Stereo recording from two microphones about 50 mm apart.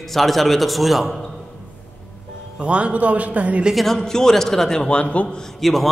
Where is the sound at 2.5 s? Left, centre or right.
Right.